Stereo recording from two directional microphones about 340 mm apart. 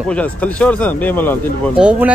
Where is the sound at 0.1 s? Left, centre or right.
Centre.